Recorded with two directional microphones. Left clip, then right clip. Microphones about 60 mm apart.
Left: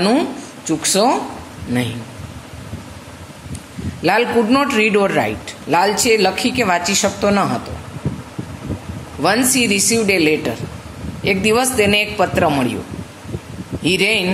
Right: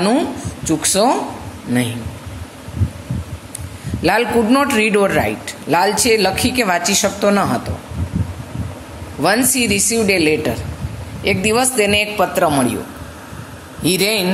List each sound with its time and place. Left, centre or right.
0.0 s a man's voice: right
4.0 s a man's voice: right
9.2 s a man's voice: right
13.8 s speech: centre